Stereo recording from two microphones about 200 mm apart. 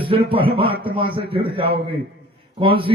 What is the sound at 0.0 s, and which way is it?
A man's voice, 25° right (ahead or behind).